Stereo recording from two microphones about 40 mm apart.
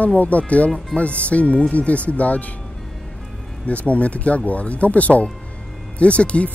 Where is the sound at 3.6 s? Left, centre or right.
Left.